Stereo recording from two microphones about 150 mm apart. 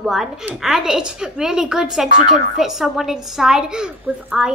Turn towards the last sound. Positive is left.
turn(degrees=-5)  # may be behind; listen again after turning